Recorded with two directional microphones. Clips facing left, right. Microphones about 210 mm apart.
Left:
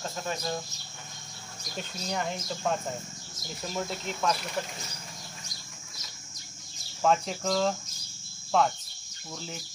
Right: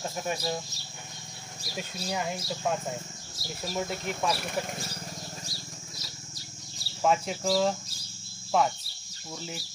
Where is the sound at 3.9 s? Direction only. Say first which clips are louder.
Even; 50° right (ahead or behind).